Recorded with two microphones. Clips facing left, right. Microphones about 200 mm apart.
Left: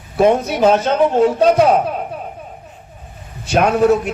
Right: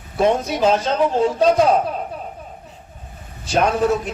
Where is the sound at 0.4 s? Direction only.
60° left (ahead or behind).